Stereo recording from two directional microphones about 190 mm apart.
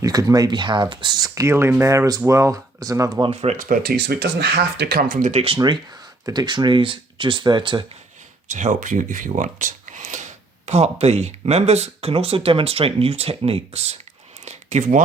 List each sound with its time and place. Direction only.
0.0 s speech: 20° right (ahead or behind)
3.2 s speech: 35° right (ahead or behind)
3.7 s speech: 55° right (ahead or behind); by 5.5 s 35° right (ahead or behind)
5.5 s speech: 20° right (ahead or behind)
8.4 s speech: 40° right (ahead or behind)
14.4 s a sound: 35° right (ahead or behind)